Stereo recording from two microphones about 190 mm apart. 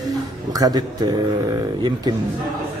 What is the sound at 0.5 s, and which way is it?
A man's voice, 20° right (ahead or behind).